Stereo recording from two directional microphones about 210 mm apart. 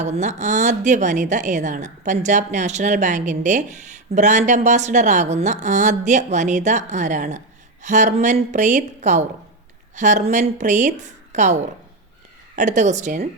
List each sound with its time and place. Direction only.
0.0 s a woman's voice: 35° right (ahead or behind)